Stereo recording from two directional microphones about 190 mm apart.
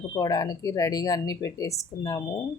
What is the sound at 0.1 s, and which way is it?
Speech, 20° left (ahead or behind).